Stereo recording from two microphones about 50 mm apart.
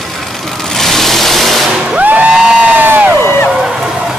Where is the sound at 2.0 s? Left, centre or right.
Right.